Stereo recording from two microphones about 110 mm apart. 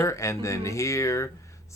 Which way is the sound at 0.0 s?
25° left (ahead or behind).